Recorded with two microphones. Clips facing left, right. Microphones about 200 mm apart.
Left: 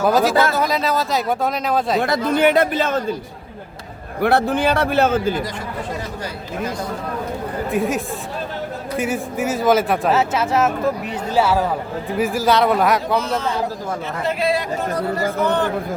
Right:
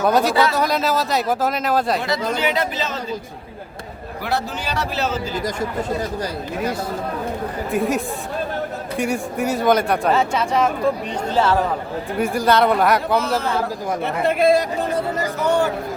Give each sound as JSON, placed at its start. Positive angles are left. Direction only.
{"t": 0.0, "sound": "speech", "side_deg": 0}
{"t": 2.0, "sound": "speech", "side_deg": 50}
{"t": 4.2, "sound": "a man's voice", "side_deg": 55}
{"t": 7.7, "sound": "speech", "side_deg": 0}
{"t": 14.3, "sound": "speech", "side_deg": -50}
{"t": 14.9, "sound": "speech", "side_deg": -20}